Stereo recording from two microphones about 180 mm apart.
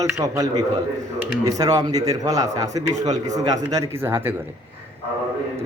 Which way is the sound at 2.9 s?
40° right (ahead or behind).